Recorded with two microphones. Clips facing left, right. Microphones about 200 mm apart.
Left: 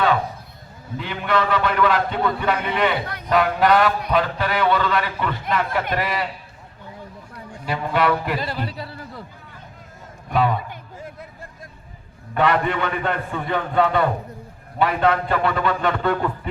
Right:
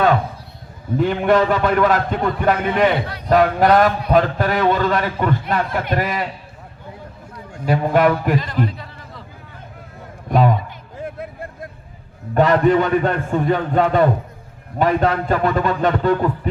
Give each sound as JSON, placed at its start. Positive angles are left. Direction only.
{"t": 0.9, "sound": "a man's voice", "side_deg": -45}
{"t": 7.6, "sound": "a man's voice", "side_deg": -45}
{"t": 8.4, "sound": "music", "side_deg": 35}
{"t": 10.3, "sound": "a sound", "side_deg": -40}
{"t": 11.0, "sound": "a sound", "side_deg": -60}
{"t": 12.3, "sound": "a man's voice", "side_deg": -40}